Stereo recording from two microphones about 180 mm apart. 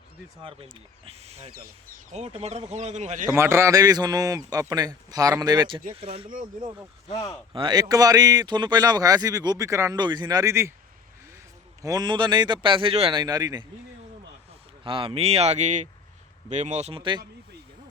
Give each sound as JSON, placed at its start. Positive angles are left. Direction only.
{"t": 0.4, "sound": "speech", "side_deg": -30}
{"t": 3.3, "sound": "speech", "side_deg": -15}
{"t": 7.5, "sound": "speech", "side_deg": -25}
{"t": 11.8, "sound": "speech", "side_deg": -20}
{"t": 14.8, "sound": "speech", "side_deg": -30}